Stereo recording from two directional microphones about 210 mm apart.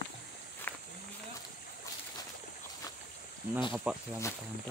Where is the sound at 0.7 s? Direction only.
10° left (ahead or behind).